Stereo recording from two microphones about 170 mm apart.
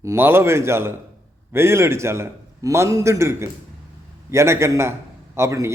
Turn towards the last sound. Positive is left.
turn(degrees=-15)  # may be behind; listen again after turning